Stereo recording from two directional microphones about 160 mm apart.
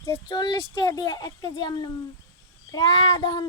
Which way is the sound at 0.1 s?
25° left (ahead or behind).